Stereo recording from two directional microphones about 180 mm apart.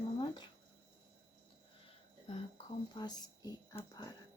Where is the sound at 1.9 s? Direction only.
30° left (ahead or behind).